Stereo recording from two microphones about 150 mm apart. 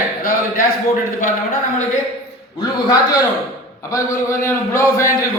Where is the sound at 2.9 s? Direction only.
25° left (ahead or behind).